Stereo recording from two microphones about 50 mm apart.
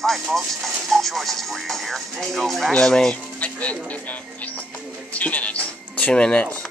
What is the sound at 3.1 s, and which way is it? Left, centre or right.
Speech, left.